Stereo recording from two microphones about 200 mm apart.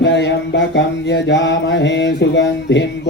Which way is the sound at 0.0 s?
60° left (ahead or behind).